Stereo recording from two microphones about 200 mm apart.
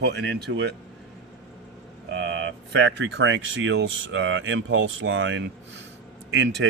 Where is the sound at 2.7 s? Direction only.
65° right (ahead or behind).